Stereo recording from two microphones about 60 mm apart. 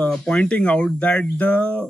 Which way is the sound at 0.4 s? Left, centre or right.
Centre.